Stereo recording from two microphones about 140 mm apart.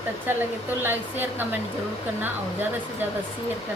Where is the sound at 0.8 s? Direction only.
15° right (ahead or behind).